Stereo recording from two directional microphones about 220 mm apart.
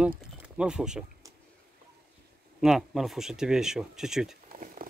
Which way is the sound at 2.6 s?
Centre (ahead or behind).